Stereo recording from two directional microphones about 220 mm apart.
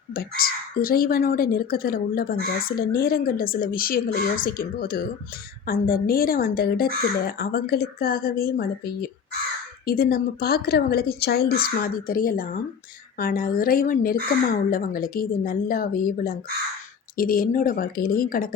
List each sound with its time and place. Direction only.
0.1 s speech: 40° left (ahead or behind)